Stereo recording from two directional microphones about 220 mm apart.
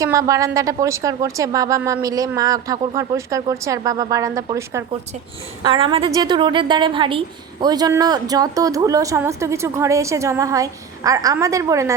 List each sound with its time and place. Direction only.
0.0 s a woman's voice: 15° right (ahead or behind)